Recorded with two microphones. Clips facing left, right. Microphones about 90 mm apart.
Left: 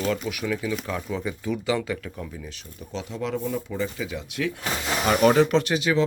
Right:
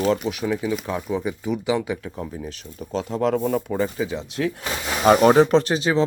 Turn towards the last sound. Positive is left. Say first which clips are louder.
# right 3 dB
turn(degrees=-35)  # may be behind; listen again after turning